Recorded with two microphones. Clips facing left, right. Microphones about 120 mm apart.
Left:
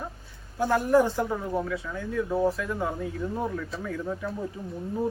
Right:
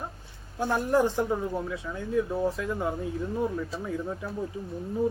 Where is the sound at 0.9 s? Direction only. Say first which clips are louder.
Left 1 dB; 20° right (ahead or behind).